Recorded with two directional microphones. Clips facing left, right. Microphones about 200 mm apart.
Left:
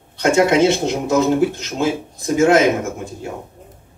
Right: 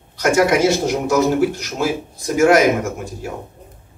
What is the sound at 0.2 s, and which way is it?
Speech, 25° left (ahead or behind).